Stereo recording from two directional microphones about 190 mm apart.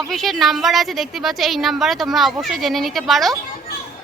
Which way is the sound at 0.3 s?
Centre (ahead or behind).